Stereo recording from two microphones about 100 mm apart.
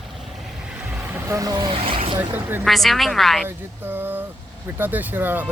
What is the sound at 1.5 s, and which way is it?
Speech, 40° right (ahead or behind).